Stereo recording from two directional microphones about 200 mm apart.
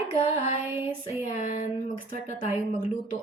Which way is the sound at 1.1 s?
35° left (ahead or behind).